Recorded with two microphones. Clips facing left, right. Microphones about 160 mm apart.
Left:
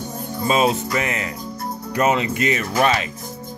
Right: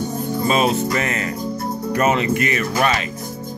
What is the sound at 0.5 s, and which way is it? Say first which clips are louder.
Speech: even; 20° left (ahead or behind).